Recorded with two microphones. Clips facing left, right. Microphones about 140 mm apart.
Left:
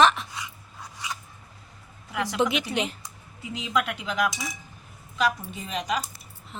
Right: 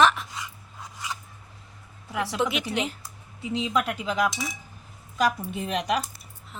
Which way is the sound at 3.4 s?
30° right (ahead or behind).